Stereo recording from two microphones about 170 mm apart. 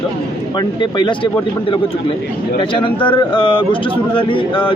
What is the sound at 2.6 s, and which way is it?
A man's voice, 30° left (ahead or behind).